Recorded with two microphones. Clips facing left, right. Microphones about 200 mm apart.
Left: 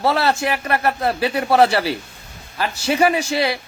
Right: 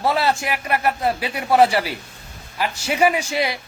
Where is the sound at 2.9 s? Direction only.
15° right (ahead or behind).